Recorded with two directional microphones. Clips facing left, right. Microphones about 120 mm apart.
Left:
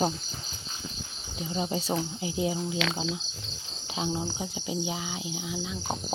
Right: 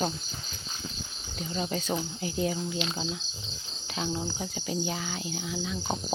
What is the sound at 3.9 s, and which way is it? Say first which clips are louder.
Insect: left 1 dB; 20° left (ahead or behind).